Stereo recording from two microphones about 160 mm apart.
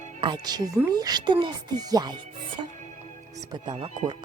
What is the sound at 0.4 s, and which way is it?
Speech, 25° right (ahead or behind).